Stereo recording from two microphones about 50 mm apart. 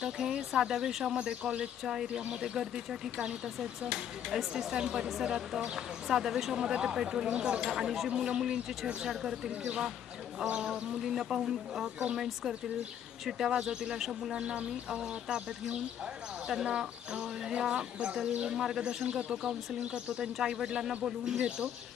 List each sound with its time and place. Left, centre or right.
0.0 s speech: centre
1.1 s speech: centre